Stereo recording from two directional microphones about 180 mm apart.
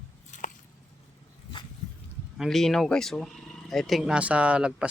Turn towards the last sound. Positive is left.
turn(degrees=-5)  # may be behind; listen again after turning